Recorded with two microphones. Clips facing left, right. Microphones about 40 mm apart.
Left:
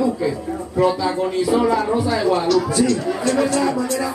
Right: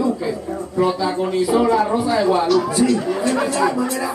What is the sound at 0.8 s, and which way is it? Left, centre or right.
A man's voice, centre.